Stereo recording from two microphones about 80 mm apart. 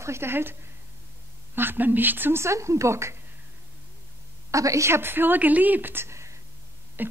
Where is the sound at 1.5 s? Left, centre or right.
Right.